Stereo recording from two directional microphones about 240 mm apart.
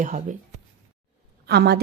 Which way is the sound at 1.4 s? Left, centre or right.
Right.